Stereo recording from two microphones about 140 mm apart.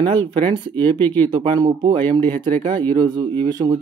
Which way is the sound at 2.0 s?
15° left (ahead or behind).